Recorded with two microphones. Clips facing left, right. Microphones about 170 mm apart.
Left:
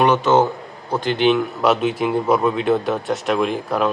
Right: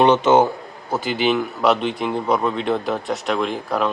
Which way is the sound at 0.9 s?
5° right (ahead or behind).